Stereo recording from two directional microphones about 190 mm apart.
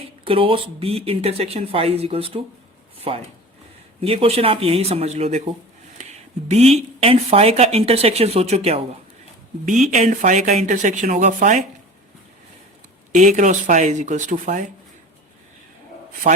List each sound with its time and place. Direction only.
0.3 s speech: 30° right (ahead or behind)
6.0 s a sound: 35° right (ahead or behind)
7.0 s speech: 30° right (ahead or behind)
13.1 s speech: 40° right (ahead or behind)
16.3 s speech: 40° right (ahead or behind)